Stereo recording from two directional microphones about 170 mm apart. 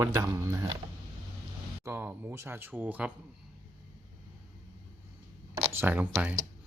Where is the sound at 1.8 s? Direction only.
15° right (ahead or behind).